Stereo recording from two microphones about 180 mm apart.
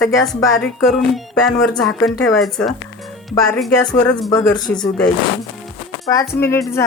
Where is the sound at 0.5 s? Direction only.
5° left (ahead or behind).